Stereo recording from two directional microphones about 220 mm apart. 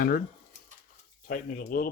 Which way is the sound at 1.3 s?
40° left (ahead or behind).